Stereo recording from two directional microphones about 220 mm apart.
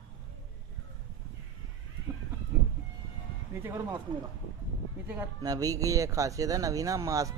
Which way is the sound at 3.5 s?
10° right (ahead or behind).